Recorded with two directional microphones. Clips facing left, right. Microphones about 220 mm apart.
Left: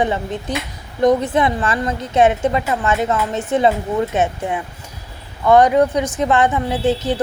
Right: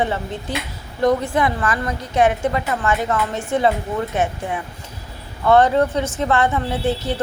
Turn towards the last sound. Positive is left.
turn(degrees=20)  # may be behind; listen again after turning